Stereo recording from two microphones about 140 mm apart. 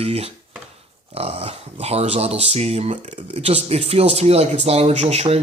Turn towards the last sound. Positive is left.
turn(degrees=-45)  # may be behind; listen again after turning